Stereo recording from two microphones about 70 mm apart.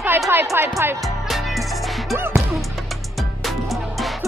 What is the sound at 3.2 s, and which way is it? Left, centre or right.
Music, centre.